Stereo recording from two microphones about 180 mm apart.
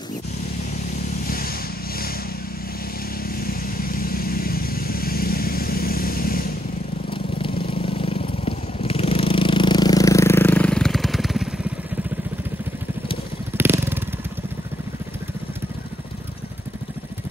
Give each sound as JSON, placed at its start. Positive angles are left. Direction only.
{"t": 1.2, "sound": "vehicle", "side_deg": 55}
{"t": 3.3, "sound": "vehicle", "side_deg": 55}
{"t": 7.1, "sound": "vehicle", "side_deg": 30}
{"t": 13.6, "sound": "motorcycle", "side_deg": -10}